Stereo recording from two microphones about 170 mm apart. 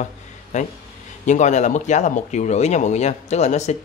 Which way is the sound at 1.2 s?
45° left (ahead or behind).